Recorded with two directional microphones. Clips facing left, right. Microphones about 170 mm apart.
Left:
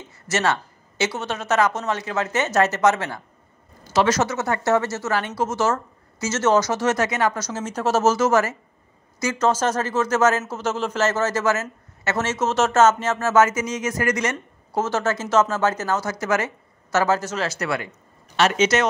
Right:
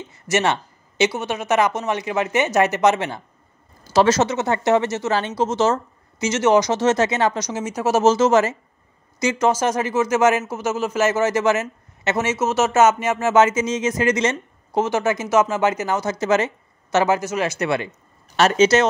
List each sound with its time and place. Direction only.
0.1 s a man's voice: 20° right (ahead or behind)
3.9 s a man's voice: 30° right (ahead or behind)
18.3 s speech: 35° right (ahead or behind)